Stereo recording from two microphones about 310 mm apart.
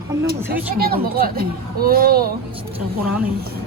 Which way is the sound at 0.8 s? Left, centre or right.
Right.